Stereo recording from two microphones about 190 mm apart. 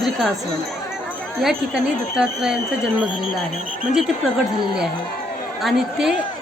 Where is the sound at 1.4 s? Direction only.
Centre (ahead or behind).